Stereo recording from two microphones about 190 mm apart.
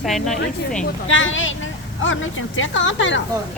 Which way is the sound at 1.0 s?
90° left.